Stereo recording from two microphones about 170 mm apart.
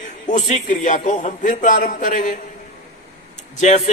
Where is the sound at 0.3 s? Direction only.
45° left (ahead or behind).